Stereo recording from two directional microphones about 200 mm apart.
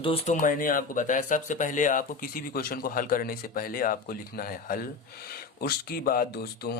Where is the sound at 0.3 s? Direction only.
45° left (ahead or behind).